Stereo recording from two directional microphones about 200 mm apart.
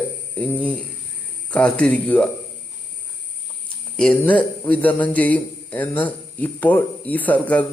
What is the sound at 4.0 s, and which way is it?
A man's voice, 5° left (ahead or behind).